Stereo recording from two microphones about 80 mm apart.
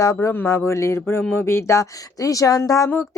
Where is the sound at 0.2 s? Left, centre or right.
Left.